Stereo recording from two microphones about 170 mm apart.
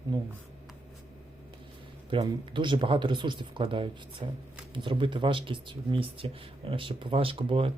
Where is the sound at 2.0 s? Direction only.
30° right (ahead or behind).